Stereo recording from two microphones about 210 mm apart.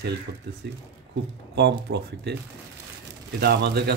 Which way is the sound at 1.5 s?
55° right (ahead or behind).